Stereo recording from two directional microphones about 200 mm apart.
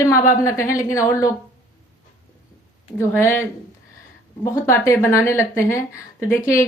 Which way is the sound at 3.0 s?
10° left (ahead or behind).